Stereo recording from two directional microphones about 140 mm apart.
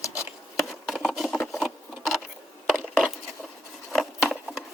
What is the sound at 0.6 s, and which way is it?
Patter, centre (ahead or behind).